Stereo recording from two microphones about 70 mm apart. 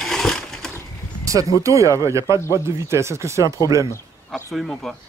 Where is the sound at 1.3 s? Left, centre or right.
Right.